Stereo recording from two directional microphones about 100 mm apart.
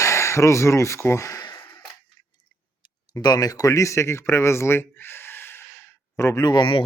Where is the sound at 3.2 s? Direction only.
40° left (ahead or behind).